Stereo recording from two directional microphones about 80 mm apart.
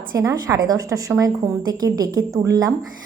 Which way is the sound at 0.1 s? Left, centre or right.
Right.